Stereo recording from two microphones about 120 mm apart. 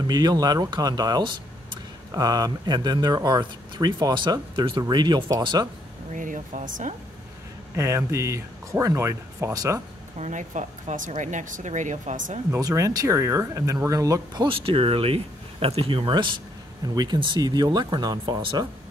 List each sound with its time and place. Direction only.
0.0 s speech: 35° right (ahead or behind)
6.1 s speech: 90° right
7.7 s speech: 25° right (ahead or behind)
10.1 s speech: 80° right
12.5 s speech: 30° right (ahead or behind)